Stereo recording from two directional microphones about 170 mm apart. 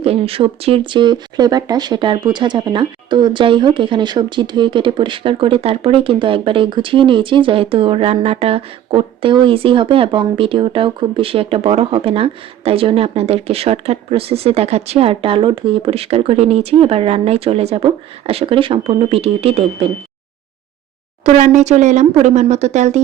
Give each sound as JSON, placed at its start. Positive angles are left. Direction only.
{"t": 0.0, "sound": "speech", "side_deg": -35}
{"t": 21.2, "sound": "speech", "side_deg": -45}